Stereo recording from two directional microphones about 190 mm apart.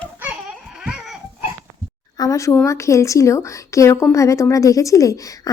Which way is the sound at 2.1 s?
20° left (ahead or behind).